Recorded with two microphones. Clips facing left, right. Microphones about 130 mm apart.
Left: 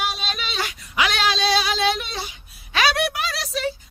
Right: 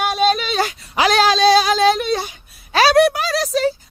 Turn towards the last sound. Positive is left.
turn(degrees=-40)  # may be behind; listen again after turning